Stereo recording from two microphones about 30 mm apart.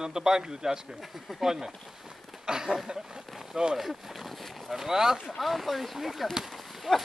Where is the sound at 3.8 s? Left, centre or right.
Centre.